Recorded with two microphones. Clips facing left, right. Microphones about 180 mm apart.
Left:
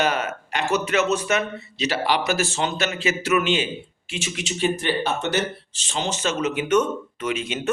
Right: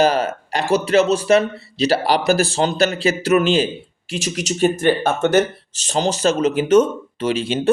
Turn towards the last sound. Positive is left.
turn(degrees=-30)  # may be behind; listen again after turning